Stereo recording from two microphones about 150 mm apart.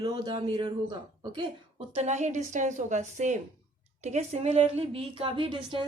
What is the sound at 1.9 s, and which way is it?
A woman's voice, 50° right (ahead or behind).